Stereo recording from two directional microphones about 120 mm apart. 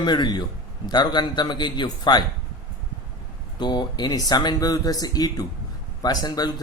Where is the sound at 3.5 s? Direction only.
35° left (ahead or behind).